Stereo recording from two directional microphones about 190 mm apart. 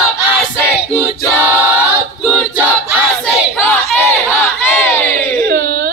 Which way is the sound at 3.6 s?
15° left (ahead or behind).